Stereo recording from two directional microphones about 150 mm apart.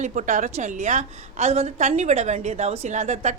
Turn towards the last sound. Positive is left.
turn(degrees=-50)  # may be behind; listen again after turning